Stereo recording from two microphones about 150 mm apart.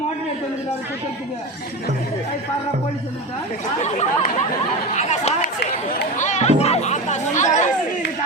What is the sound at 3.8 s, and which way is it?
Speech, 50° left (ahead or behind).